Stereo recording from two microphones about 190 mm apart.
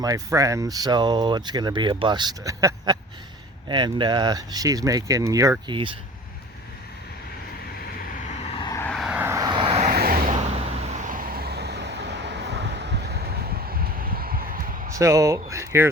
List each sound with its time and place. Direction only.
0.0 s speech: 15° right (ahead or behind)
8.3 s vehicle: 35° left (ahead or behind)
8.8 s vehicle: 5° left (ahead or behind)
9.0 s vehicle: 10° right (ahead or behind); by 9.8 s 25° right (ahead or behind)
9.8 s vehicle: 50° right (ahead or behind)
10.3 s vehicle: 30° right (ahead or behind); by 14.8 s 45° right (ahead or behind)
14.9 s speech: 15° right (ahead or behind)